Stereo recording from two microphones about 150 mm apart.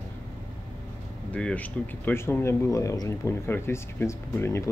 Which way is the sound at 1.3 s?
10° left (ahead or behind).